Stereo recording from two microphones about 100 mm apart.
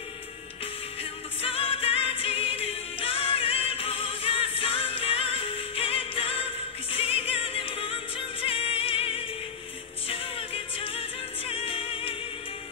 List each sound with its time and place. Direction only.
1.4 s music: 70° left (ahead or behind)